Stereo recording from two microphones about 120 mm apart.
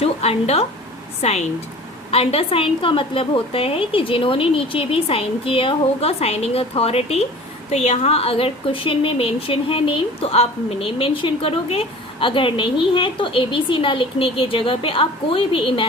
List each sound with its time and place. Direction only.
0.0 s a woman's voice: 60° left (ahead or behind)